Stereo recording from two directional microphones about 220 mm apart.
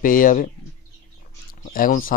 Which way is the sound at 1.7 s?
40° left (ahead or behind).